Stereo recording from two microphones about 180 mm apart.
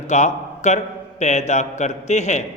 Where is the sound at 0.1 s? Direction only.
40° left (ahead or behind).